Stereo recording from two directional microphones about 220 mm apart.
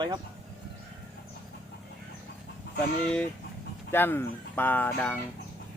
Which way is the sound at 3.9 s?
10° left (ahead or behind).